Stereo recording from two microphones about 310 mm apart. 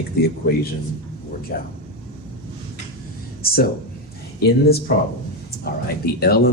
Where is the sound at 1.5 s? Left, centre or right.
Left.